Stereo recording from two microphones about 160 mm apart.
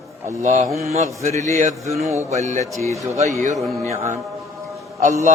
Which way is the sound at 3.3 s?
50° right (ahead or behind).